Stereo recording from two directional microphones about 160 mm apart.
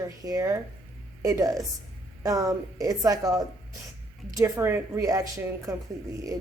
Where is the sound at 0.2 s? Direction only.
20° right (ahead or behind).